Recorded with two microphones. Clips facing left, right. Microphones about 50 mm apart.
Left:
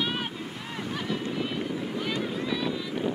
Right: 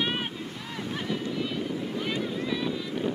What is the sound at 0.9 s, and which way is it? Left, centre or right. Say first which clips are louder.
Wind noise: even; centre.